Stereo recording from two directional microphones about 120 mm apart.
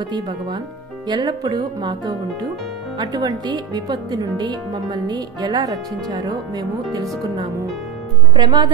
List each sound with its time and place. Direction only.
1.0 s speech: 40° right (ahead or behind)
8.4 s speech: 40° right (ahead or behind)